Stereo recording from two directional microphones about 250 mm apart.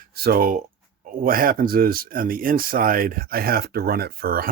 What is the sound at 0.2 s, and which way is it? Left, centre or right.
Speech, right.